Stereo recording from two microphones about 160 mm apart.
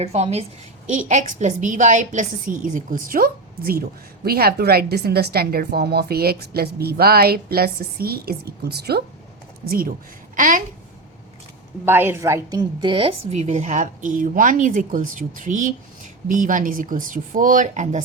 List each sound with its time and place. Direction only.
0.0 s a woman's voice: 40° right (ahead or behind); by 9.0 s 85° right
9.6 s a woman's voice: 65° right (ahead or behind)
10.3 s speech: 55° right (ahead or behind)
11.9 s a woman's voice: 15° right (ahead or behind); by 18.0 s 50° right (ahead or behind)